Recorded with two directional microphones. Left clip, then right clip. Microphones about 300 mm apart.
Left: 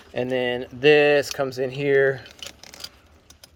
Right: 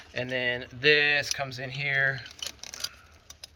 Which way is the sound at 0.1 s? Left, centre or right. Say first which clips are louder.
Left 5 dB; centre.